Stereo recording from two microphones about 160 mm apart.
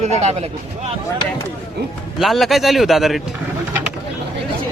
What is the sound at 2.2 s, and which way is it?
Speech, centre (ahead or behind).